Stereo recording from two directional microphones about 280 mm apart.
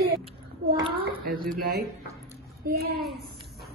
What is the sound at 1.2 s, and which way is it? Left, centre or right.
Speech, right.